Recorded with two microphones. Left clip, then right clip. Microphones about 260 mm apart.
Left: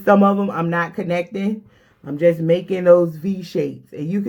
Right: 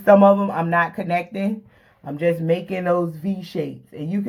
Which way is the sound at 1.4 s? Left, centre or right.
Centre.